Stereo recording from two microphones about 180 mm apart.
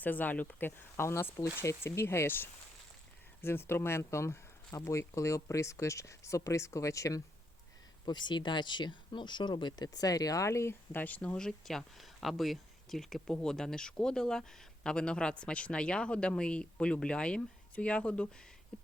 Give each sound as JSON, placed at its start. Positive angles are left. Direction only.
{"t": 0.0, "sound": "speech", "side_deg": 10}